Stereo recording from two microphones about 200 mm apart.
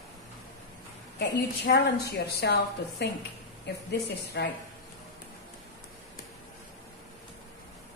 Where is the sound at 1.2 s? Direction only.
55° left (ahead or behind).